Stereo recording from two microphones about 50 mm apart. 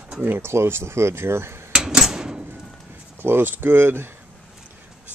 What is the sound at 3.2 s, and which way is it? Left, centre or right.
Speech, right.